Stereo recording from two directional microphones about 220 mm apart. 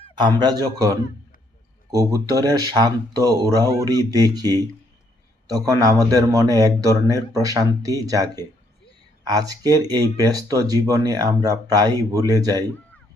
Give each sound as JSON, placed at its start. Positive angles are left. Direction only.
{"t": 0.2, "sound": "speech", "side_deg": -20}